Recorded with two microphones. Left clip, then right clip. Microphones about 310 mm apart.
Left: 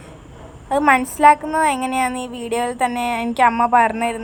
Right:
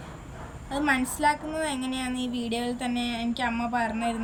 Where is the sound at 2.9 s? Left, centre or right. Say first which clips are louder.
Left 9 dB; centre.